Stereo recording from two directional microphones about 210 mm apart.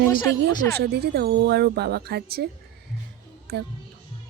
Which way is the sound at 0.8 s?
50° right (ahead or behind).